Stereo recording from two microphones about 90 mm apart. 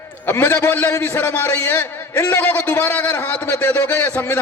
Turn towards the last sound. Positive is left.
turn(degrees=25)  # may be behind; listen again after turning